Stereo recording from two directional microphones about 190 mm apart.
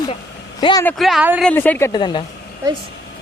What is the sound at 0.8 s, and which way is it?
Speech, centre (ahead or behind).